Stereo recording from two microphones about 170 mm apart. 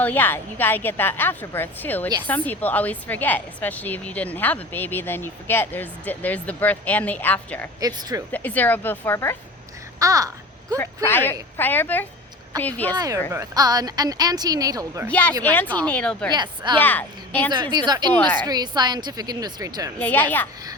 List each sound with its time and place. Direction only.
0.0 s a woman's voice: 10° left (ahead or behind)
7.8 s a woman's voice: 25° right (ahead or behind)
8.3 s a woman's voice: 10° left (ahead or behind)
10.0 s a sound: 20° right (ahead or behind)
10.8 s a woman's voice: 10° left (ahead or behind)
13.0 s a woman's voice: 20° right (ahead or behind)
15.1 s a woman's voice: 10° left (ahead or behind)
16.3 s a woman's voice: 25° right (ahead or behind)
16.8 s a woman's voice: 10° left (ahead or behind)
17.5 s a woman's voice: 25° right (ahead or behind)
20.0 s a woman's voice: 10° left (ahead or behind)